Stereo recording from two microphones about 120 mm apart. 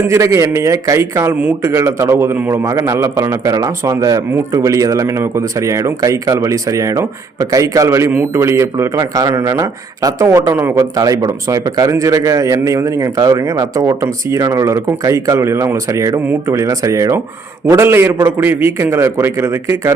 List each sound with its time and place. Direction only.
0.1 s a man's voice: 25° right (ahead or behind)
10.9 s a man's voice: 30° right (ahead or behind)